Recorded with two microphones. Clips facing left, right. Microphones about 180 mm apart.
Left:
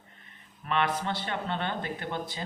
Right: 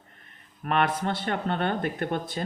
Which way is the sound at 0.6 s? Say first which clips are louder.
Right 3 dB; 50° right (ahead or behind).